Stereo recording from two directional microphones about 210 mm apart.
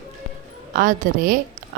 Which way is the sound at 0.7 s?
40° right (ahead or behind).